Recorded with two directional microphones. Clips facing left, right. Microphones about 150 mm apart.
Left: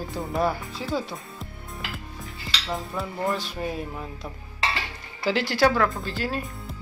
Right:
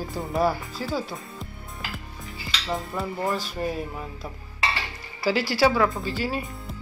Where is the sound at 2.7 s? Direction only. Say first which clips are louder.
Right 2 dB; centre (ahead or behind).